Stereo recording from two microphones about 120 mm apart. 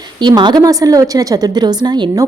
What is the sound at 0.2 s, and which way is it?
A woman's voice, 40° right (ahead or behind).